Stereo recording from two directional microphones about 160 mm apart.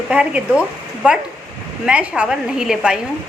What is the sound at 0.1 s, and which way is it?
A woman's voice, 5° right (ahead or behind).